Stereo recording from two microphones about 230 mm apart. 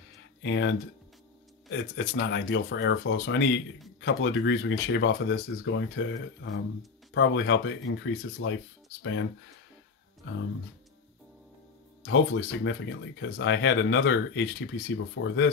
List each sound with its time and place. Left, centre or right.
0.4 s speech: left
12.0 s speech: left